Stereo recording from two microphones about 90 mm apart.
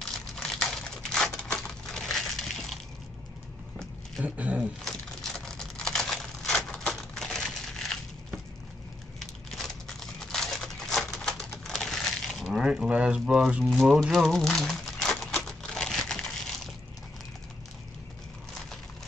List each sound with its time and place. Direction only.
0.4 s crumpling: 5° left (ahead or behind)
4.2 s speech: 15° right (ahead or behind)
4.8 s a sound: 5° left (ahead or behind)
9.2 s crumpling: 5° left (ahead or behind)
11.6 s a sound: 5° left (ahead or behind)
13.8 s typewriter: centre (ahead or behind)